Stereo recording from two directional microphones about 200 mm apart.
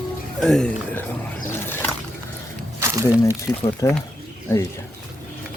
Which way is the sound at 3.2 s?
15° left (ahead or behind).